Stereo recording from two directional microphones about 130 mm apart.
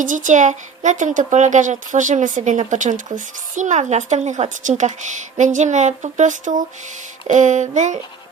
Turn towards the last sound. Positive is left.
turn(degrees=-70)  # may be behind; listen again after turning